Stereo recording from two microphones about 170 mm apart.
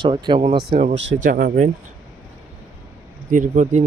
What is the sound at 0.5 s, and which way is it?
Speech, 70° right (ahead or behind).